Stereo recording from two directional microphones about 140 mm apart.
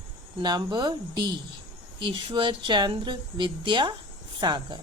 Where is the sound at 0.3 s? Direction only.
30° right (ahead or behind).